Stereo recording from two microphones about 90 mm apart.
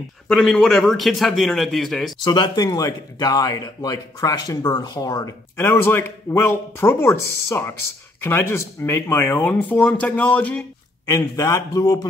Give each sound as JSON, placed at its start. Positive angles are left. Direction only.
{"t": 0.3, "sound": "a man's voice", "side_deg": 5}
{"t": 2.2, "sound": "speech", "side_deg": 55}
{"t": 5.6, "sound": "speech", "side_deg": 25}
{"t": 11.1, "sound": "a man's voice", "side_deg": 40}